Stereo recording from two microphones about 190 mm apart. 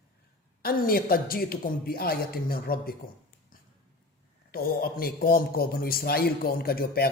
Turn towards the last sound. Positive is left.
turn(degrees=50)  # may be behind; listen again after turning